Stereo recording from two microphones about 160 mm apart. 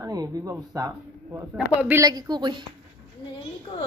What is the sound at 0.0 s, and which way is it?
Speech, 20° right (ahead or behind).